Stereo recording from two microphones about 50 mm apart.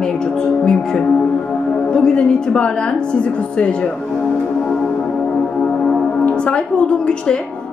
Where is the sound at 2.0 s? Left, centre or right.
Centre.